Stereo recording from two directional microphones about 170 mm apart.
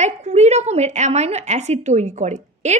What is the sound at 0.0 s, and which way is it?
A woman's voice, 40° right (ahead or behind).